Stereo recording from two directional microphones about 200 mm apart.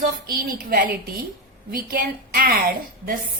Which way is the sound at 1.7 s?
45° right (ahead or behind).